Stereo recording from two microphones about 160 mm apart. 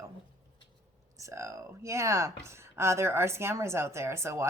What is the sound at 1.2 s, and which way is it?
Speech, 20° right (ahead or behind).